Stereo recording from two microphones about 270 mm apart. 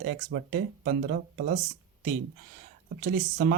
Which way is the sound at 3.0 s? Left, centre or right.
Right.